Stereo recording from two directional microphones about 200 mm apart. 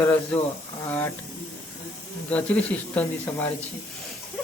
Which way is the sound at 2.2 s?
5° left (ahead or behind).